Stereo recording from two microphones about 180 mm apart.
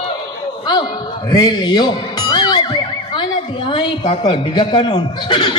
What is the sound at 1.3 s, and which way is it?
Speech, 25° left (ahead or behind).